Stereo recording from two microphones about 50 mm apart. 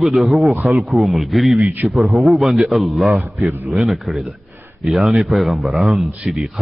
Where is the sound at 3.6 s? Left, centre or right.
Centre.